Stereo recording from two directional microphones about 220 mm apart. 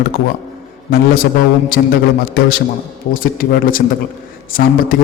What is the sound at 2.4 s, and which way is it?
A man's voice, 45° left (ahead or behind).